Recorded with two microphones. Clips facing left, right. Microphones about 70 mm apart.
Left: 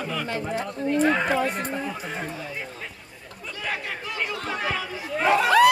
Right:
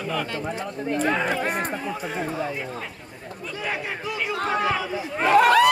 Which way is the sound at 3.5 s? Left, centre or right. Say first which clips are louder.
Right 1 dB; centre.